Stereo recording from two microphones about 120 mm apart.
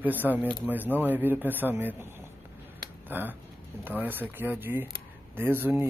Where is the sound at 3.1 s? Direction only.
15° right (ahead or behind).